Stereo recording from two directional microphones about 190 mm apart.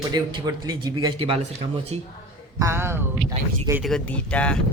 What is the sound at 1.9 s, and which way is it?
Speech, 35° right (ahead or behind).